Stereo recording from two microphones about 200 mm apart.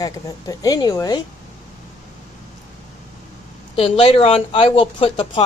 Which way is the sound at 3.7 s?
25° left (ahead or behind).